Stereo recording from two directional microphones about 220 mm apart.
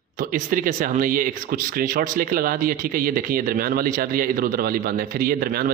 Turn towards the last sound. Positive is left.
turn(degrees=-40)  # may be behind; listen again after turning